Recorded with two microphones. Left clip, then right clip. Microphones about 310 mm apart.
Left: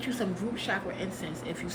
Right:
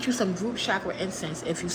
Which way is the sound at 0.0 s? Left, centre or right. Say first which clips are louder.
Right 5 dB; centre.